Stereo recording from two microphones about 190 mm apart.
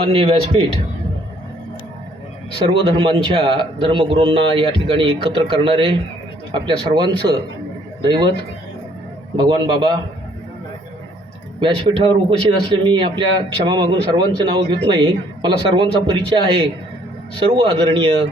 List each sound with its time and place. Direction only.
0.1 s speech: 30° right (ahead or behind)
2.6 s speech: 25° right (ahead or behind)
9.3 s speech: 25° right (ahead or behind)
11.6 s speech: 25° right (ahead or behind)